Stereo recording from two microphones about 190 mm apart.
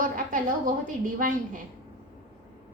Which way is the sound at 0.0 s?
45° right (ahead or behind).